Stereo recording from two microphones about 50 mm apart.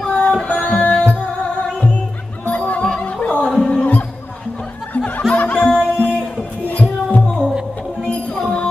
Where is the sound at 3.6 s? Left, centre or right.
Left.